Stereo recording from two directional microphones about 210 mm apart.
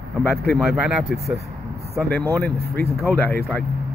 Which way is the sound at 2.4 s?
50° right (ahead or behind).